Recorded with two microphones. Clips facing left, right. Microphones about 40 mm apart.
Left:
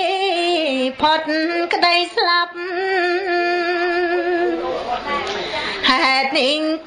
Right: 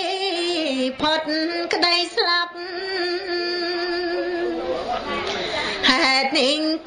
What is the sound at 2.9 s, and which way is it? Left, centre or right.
Music, left.